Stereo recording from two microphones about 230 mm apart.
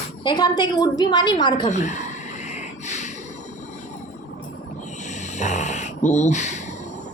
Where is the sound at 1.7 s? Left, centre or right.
Left.